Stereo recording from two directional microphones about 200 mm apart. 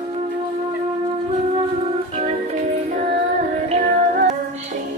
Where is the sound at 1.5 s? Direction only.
30° right (ahead or behind).